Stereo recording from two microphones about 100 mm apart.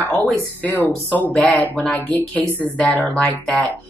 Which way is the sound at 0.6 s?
20° left (ahead or behind).